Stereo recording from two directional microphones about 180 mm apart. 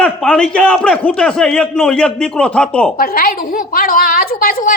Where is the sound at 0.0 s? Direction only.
5° left (ahead or behind).